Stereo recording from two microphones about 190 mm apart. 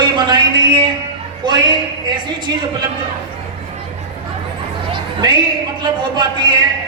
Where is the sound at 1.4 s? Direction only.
25° right (ahead or behind).